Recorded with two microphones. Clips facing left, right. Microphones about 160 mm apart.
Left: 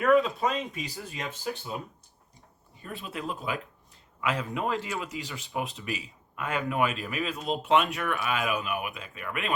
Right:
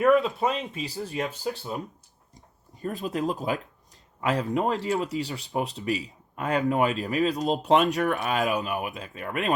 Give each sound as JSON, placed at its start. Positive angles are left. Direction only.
{"t": 0.0, "sound": "speech", "side_deg": -25}
{"t": 2.8, "sound": "speech", "side_deg": -40}